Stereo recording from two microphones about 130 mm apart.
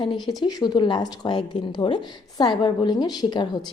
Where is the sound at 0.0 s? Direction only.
40° left (ahead or behind).